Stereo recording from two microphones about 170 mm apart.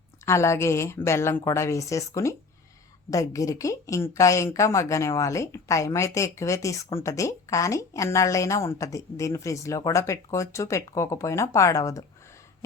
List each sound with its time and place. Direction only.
0.3 s speech: 15° left (ahead or behind)